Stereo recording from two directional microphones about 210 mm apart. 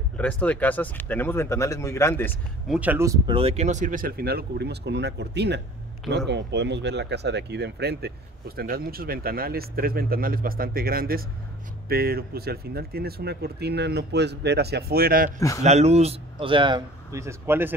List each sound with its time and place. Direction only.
0.2 s speech: 5° left (ahead or behind)
2.7 s speech: 10° right (ahead or behind)
3.3 s speech: 30° right (ahead or behind)
15.6 s speech: 30° right (ahead or behind); by 17.7 s 10° right (ahead or behind)